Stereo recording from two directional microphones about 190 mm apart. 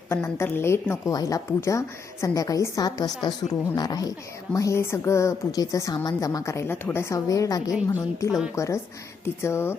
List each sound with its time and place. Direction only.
0.1 s a woman's voice: 15° left (ahead or behind)